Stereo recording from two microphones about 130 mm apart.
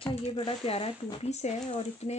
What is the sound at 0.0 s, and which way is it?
Speech, 45° left (ahead or behind).